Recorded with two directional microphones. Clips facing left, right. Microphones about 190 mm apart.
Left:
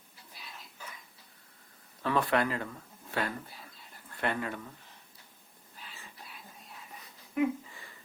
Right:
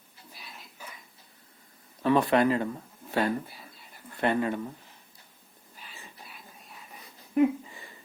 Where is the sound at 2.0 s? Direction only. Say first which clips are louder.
Right 6 dB; 20° right (ahead or behind).